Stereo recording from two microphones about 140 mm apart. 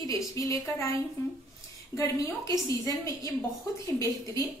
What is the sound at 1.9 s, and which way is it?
A woman's voice, 20° left (ahead or behind).